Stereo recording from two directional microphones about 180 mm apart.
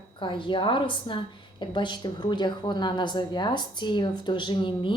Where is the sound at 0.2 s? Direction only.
25° left (ahead or behind).